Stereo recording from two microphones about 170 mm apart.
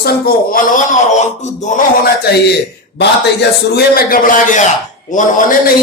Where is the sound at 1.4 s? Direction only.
45° left (ahead or behind).